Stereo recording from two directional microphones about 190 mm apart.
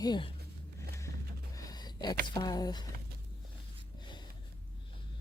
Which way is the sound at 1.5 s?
20° left (ahead or behind).